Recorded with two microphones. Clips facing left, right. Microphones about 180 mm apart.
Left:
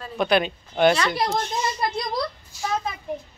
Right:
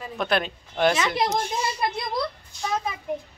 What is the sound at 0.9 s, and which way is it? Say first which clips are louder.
Speech: even; 20° right (ahead or behind).